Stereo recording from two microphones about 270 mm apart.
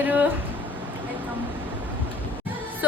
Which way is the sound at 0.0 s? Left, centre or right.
Centre.